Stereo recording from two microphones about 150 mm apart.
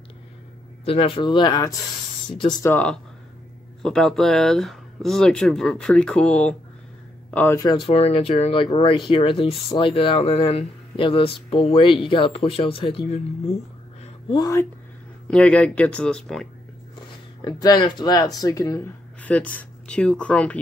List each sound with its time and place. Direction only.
0.8 s speech: 40° left (ahead or behind)
2.6 s speech: 10° left (ahead or behind)
7.6 s speech: 30° left (ahead or behind)
14.3 s speech: 25° left (ahead or behind)
15.2 s speech: 10° left (ahead or behind)
17.5 s speech: 25° left (ahead or behind)
19.2 s speech: 10° left (ahead or behind)